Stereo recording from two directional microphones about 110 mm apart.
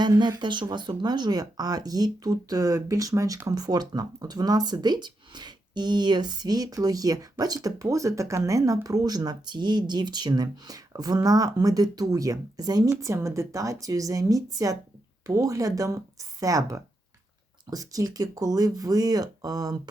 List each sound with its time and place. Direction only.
0.0 s speech: 40° right (ahead or behind)